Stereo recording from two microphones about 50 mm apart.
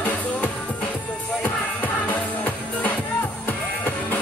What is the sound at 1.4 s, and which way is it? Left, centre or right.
Music, left.